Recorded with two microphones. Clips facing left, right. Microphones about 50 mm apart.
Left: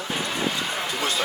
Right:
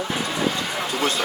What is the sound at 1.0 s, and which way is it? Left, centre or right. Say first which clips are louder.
Speech: right 3 dB; right.